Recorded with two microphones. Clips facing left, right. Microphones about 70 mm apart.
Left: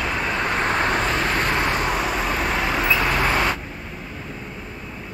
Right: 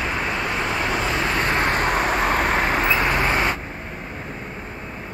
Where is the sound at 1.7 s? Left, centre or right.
Right.